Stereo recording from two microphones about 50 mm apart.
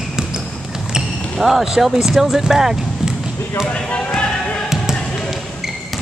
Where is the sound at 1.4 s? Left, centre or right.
Centre.